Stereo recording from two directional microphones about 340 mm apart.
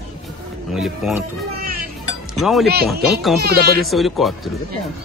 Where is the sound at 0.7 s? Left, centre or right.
Centre.